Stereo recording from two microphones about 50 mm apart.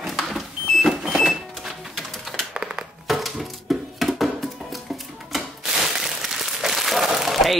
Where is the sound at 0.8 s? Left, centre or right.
Centre.